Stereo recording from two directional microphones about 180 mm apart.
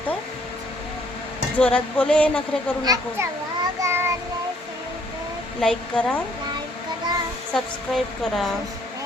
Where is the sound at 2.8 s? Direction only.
20° right (ahead or behind).